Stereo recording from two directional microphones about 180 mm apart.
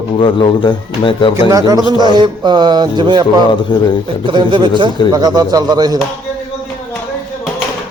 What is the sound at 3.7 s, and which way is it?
Speech, 25° left (ahead or behind).